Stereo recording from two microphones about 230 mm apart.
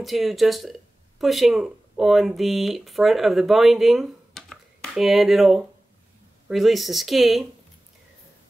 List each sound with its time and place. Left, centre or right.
0.0 s speech: centre